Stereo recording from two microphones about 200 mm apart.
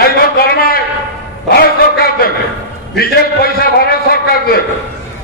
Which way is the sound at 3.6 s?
50° left (ahead or behind).